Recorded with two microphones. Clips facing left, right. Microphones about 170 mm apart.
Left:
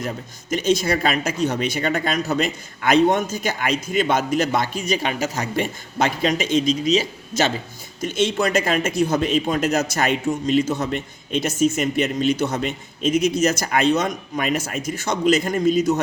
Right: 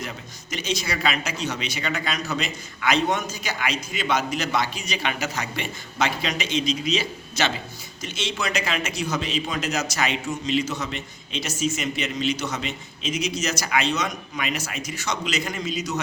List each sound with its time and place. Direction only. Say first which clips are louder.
0.5 s a man's voice: left 9 dB; 50° left (ahead or behind)